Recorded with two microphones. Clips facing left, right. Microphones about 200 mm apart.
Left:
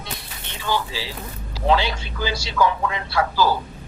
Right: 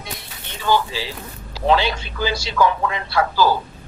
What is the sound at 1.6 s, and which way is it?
A man's voice, 65° right (ahead or behind).